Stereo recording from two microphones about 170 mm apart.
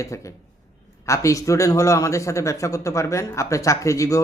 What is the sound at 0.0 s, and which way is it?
A man's voice, 20° left (ahead or behind).